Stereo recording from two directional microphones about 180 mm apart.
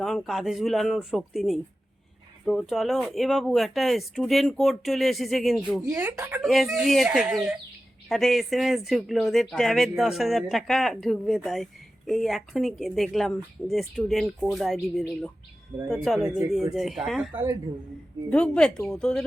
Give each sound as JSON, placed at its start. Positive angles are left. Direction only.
{"t": 0.0, "sound": "speech", "side_deg": 0}
{"t": 6.4, "sound": "speech", "side_deg": 0}
{"t": 17.3, "sound": "speech", "side_deg": -20}
{"t": 18.3, "sound": "speech", "side_deg": 5}